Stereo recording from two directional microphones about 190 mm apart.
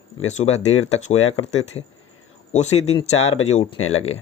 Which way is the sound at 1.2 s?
90° left.